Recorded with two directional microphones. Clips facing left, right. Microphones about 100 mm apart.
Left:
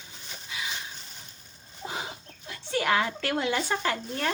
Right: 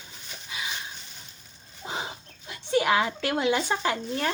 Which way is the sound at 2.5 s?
15° right (ahead or behind).